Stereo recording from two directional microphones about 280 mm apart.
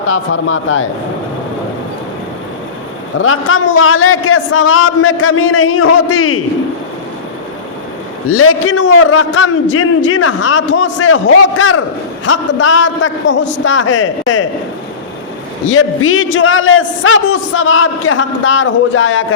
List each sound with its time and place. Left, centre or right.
0.1 s a man's voice: left
3.2 s a man's voice: left
8.3 s a man's voice: left
15.7 s a man's voice: left